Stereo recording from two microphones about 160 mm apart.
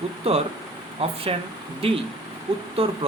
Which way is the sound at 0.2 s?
35° right (ahead or behind).